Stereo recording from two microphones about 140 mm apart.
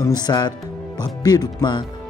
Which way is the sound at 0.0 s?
30° left (ahead or behind).